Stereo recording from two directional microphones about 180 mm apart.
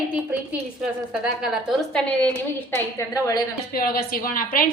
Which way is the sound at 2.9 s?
15° left (ahead or behind).